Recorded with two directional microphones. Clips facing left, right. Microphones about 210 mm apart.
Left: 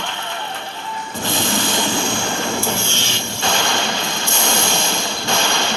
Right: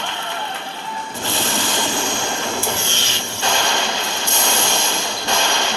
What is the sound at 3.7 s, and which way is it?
Train, 15° right (ahead or behind).